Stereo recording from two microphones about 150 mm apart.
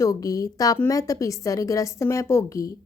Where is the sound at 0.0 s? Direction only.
20° left (ahead or behind).